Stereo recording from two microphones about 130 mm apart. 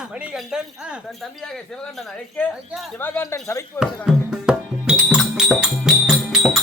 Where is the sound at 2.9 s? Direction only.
15° left (ahead or behind).